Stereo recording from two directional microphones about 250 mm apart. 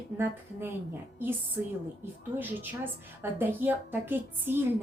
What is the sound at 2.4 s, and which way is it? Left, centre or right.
A woman's voice, centre.